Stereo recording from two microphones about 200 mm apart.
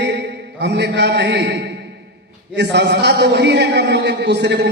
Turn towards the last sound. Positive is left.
turn(degrees=-60)  # may be behind; listen again after turning